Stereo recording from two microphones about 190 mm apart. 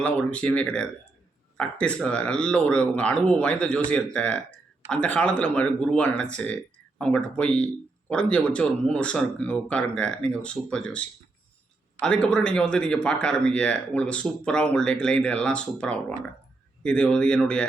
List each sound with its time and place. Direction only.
0.0 s speech: 5° left (ahead or behind)